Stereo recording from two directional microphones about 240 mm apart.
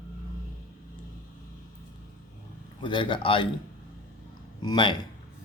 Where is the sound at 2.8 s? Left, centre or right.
Left.